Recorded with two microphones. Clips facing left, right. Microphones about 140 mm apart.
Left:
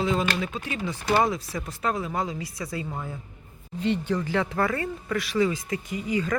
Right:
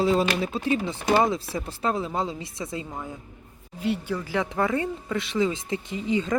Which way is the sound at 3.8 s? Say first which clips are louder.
Left 2 dB; 10° right (ahead or behind).